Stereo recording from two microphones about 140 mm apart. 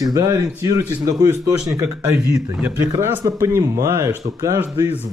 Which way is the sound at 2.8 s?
15° right (ahead or behind).